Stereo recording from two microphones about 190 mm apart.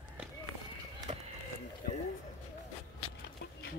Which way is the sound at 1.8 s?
50° left (ahead or behind).